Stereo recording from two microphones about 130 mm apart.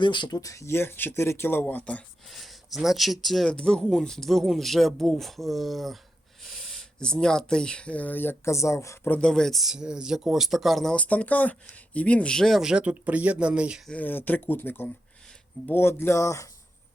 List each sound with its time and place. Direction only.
0.0 s speech: 35° left (ahead or behind)
9.1 s speech: 5° left (ahead or behind)
13.9 s speech: 15° left (ahead or behind)